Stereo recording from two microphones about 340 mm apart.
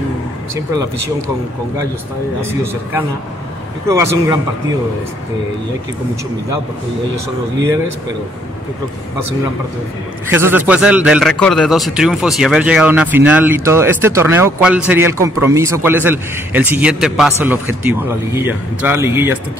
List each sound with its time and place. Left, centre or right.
3.9 s speech: centre
10.3 s speech: centre